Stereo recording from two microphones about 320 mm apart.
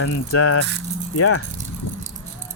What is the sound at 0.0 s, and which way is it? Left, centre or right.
Speech, left.